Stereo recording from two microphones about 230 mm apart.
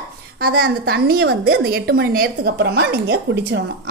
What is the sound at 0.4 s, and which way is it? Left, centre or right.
A woman's voice, right.